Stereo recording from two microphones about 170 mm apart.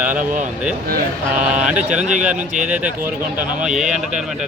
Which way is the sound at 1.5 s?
5° right (ahead or behind).